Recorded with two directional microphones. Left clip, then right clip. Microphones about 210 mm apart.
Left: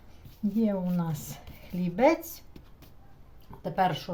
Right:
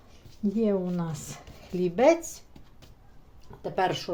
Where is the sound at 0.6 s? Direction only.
25° right (ahead or behind).